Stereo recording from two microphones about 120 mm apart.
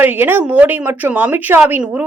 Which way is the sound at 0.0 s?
15° right (ahead or behind).